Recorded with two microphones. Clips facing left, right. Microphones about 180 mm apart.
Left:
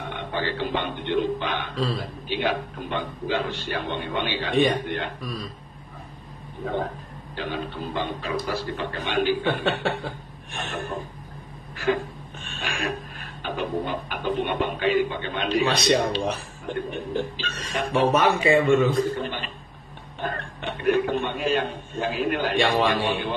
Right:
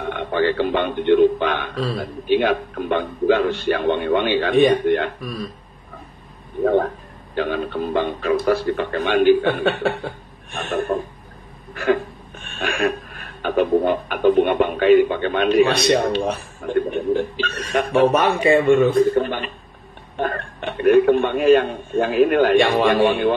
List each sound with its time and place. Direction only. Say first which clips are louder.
0.2 s a man's voice: right 9 dB; 55° right (ahead or behind)
7.3 s a man's voice: right 8 dB; 55° right (ahead or behind)
11.7 s hiccup: right 5 dB; 55° right (ahead or behind)
13.4 s a man's voice: right 10 dB; 55° right (ahead or behind)